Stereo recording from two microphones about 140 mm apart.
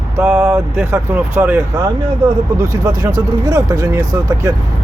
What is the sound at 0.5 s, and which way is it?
Speech, 20° right (ahead or behind).